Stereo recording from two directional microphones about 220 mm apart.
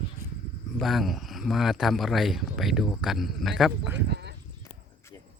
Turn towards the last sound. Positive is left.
turn(degrees=-5)  # may be behind; listen again after turning